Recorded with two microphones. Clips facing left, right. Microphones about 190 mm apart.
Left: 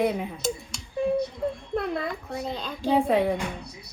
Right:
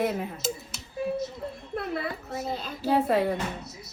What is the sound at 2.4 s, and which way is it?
Speech, 5° right (ahead or behind).